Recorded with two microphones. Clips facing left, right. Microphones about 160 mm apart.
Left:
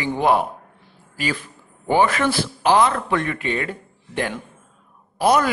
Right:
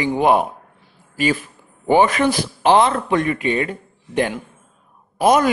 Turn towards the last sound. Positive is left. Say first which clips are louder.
# right 3 dB
turn(degrees=-20)  # may be behind; listen again after turning